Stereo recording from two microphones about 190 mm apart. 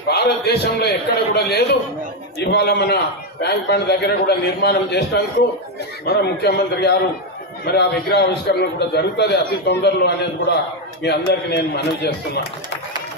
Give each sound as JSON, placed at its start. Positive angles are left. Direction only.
{"t": 0.1, "sound": "a man's voice", "side_deg": 60}